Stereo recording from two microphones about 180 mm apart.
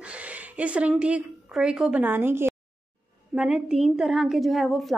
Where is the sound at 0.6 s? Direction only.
5° right (ahead or behind).